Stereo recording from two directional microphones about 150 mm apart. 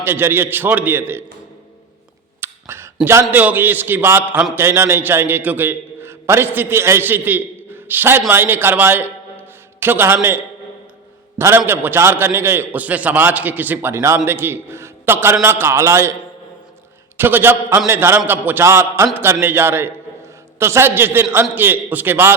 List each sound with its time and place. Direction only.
0.0 s a man's voice: 15° right (ahead or behind)
2.4 s a man's voice: 15° right (ahead or behind)
11.3 s a man's voice: 15° right (ahead or behind)
17.2 s a man's voice: 15° right (ahead or behind)